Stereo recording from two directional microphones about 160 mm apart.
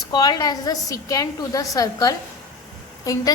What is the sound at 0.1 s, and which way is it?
A woman's voice, 25° left (ahead or behind).